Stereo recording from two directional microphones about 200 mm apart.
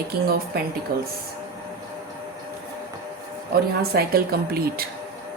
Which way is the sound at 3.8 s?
50° right (ahead or behind).